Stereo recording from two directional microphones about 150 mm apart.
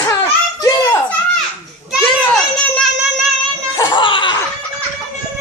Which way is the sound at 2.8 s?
Centre (ahead or behind).